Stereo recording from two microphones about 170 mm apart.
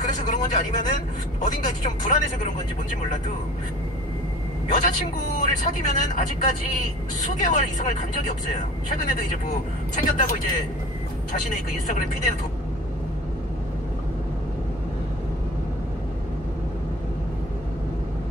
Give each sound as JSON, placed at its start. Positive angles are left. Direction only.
{"t": 0.0, "sound": "vehicle", "side_deg": 50}
{"t": 1.4, "sound": "a man's voice", "side_deg": 50}
{"t": 4.6, "sound": "a man's voice", "side_deg": 50}
{"t": 9.9, "sound": "a man's voice", "side_deg": 55}